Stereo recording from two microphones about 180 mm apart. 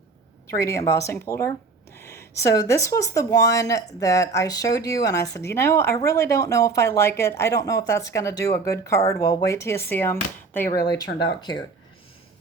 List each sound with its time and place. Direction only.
0.4 s speech: 15° left (ahead or behind)